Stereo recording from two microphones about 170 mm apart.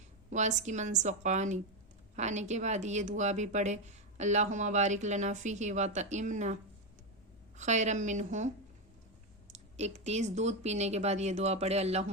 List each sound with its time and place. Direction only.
0.3 s a woman's voice: 45° right (ahead or behind)
9.5 s a woman's voice: 40° right (ahead or behind)